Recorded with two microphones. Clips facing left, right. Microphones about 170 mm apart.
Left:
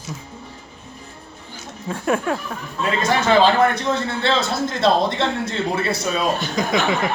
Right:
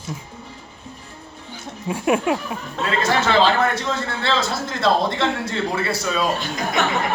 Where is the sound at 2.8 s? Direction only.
75° right (ahead or behind).